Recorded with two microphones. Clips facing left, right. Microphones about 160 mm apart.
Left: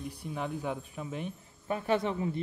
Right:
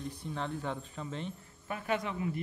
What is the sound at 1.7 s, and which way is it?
Speech, 30° left (ahead or behind).